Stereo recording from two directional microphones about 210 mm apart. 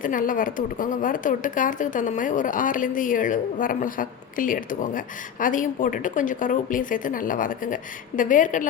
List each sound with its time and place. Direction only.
0.0 s a woman's voice: 40° left (ahead or behind)